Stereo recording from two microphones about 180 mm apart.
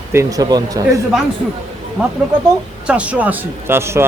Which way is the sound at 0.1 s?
15° right (ahead or behind).